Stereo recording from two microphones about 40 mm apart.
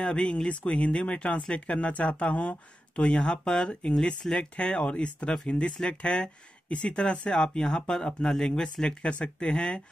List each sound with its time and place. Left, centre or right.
0.0 s speech: left
8.8 s speech: left